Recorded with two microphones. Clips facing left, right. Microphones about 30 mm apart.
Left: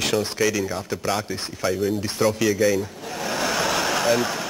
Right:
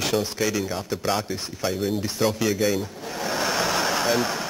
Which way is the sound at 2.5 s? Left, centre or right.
Centre.